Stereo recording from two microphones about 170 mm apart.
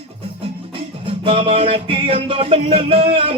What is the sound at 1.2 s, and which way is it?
Music, 35° right (ahead or behind).